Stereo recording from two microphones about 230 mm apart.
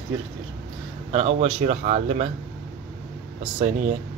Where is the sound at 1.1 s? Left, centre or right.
Right.